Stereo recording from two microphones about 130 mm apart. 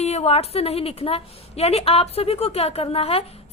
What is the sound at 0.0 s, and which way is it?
A woman's voice, 55° left (ahead or behind).